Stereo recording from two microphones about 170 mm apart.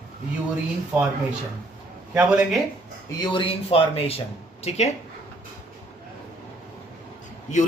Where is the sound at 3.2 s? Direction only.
25° left (ahead or behind).